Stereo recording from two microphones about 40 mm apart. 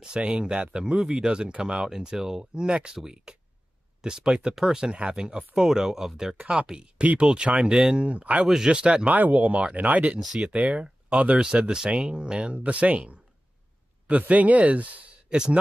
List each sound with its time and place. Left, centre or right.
0.0 s speech: right
5.7 s speech: centre
7.0 s speech: right
7.6 s speech: right
9.1 s speech: right
11.3 s speech: right
15.2 s speech: right